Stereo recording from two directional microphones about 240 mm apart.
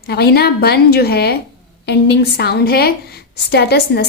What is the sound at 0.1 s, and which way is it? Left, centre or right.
A woman's voice, left.